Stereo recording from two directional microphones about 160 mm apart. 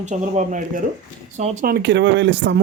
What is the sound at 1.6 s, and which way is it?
Speech, 90° right.